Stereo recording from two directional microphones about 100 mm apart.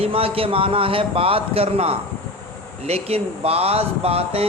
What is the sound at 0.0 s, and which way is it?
Speech, 75° right (ahead or behind).